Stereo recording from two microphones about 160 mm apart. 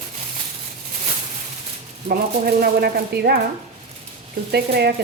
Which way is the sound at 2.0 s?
65° right (ahead or behind).